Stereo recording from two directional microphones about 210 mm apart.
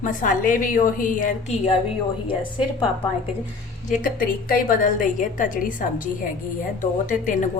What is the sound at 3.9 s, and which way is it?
A woman's voice, 40° left (ahead or behind).